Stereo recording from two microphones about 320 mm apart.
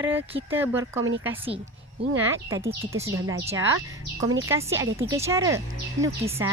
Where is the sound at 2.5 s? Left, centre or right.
Centre.